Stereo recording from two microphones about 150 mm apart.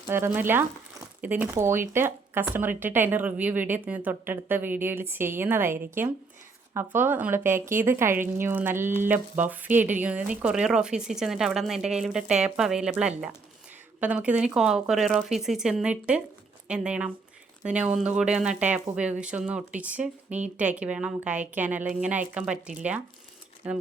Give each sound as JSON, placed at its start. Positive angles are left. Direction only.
{"t": 0.1, "sound": "speech", "side_deg": -15}
{"t": 6.9, "sound": "speech", "side_deg": -15}